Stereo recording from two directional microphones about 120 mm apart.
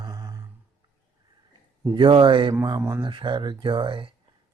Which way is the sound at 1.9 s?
40° right (ahead or behind).